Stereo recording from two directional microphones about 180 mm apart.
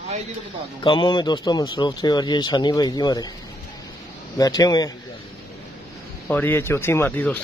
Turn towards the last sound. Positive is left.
turn(degrees=10)  # may be behind; listen again after turning